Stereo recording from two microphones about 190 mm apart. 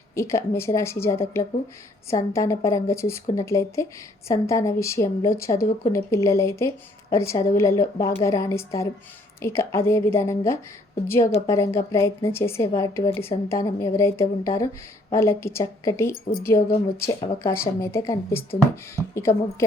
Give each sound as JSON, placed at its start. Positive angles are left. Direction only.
{"t": 0.1, "sound": "a woman's voice", "side_deg": 15}